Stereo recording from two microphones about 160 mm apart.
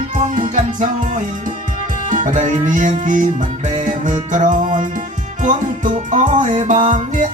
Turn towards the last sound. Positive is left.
turn(degrees=-50)  # may be behind; listen again after turning